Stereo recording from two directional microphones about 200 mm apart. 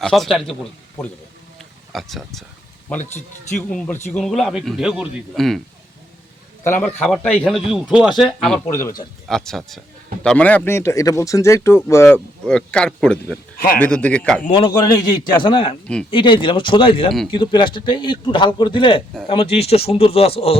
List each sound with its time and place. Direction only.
0.0 s speech: centre (ahead or behind)
1.5 s a sound: centre (ahead or behind)
3.7 s speech: 5° left (ahead or behind)
6.7 s speech: 5° left (ahead or behind)
9.2 s speech: centre (ahead or behind)
14.7 s speech: 20° left (ahead or behind)